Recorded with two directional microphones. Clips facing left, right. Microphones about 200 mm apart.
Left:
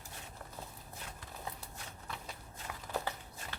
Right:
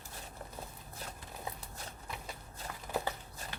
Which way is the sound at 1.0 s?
35° right (ahead or behind).